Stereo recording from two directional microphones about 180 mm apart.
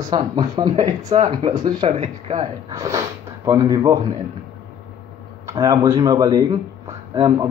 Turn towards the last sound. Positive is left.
turn(degrees=-15)  # may be behind; listen again after turning